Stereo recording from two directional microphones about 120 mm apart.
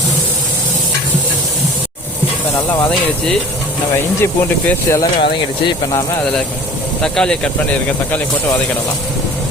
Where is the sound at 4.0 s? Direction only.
20° left (ahead or behind).